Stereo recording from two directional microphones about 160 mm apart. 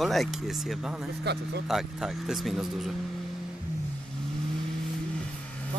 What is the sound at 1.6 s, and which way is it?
Speech, centre (ahead or behind).